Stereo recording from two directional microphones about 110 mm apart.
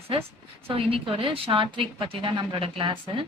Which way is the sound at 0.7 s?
55° right (ahead or behind).